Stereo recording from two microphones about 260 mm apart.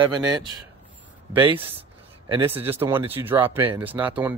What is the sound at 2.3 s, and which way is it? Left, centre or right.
Speech, centre.